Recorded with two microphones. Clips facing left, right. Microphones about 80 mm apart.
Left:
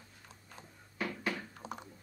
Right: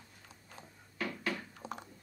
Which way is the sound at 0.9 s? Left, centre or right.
Centre.